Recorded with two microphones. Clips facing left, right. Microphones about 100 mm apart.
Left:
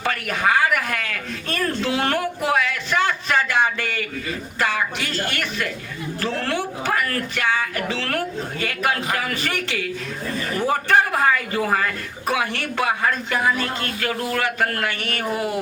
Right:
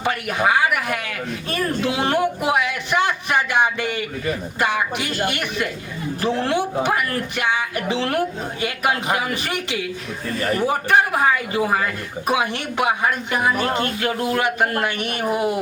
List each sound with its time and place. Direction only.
0.0 s a man's voice: 15° right (ahead or behind)